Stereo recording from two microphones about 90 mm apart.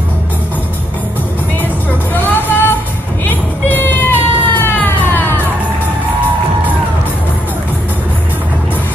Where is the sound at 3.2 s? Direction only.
20° left (ahead or behind).